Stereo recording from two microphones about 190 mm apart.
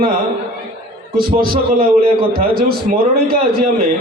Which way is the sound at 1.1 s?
50° right (ahead or behind).